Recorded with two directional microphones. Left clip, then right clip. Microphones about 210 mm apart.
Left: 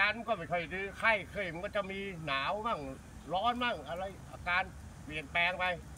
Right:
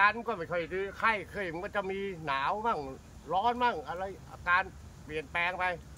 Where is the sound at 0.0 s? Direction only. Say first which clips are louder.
Right 4 dB; 15° right (ahead or behind).